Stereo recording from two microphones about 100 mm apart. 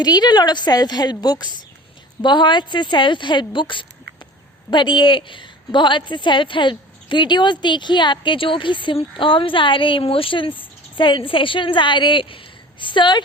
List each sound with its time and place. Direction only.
0.0 s a woman's voice: 45° left (ahead or behind)